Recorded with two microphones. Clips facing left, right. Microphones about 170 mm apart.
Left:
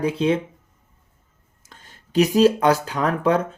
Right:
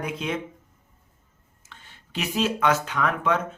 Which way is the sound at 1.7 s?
40° left (ahead or behind).